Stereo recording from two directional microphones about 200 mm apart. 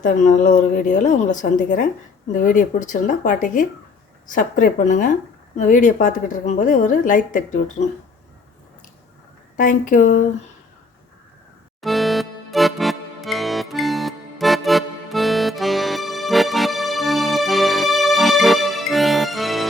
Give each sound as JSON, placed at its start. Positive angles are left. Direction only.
{"t": 0.0, "sound": "a woman's voice", "side_deg": 40}
{"t": 9.6, "sound": "a woman's voice", "side_deg": 40}
{"t": 11.8, "sound": "music", "side_deg": 0}